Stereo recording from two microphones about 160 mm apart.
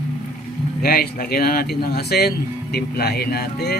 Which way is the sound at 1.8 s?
80° left.